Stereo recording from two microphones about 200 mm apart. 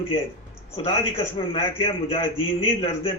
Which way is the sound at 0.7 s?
30° left (ahead or behind).